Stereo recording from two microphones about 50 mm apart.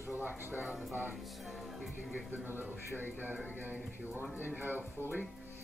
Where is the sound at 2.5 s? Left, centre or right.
Right.